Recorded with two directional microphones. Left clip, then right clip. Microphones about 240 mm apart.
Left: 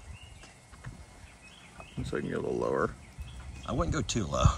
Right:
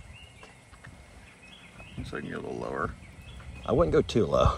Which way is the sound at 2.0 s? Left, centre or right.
Left.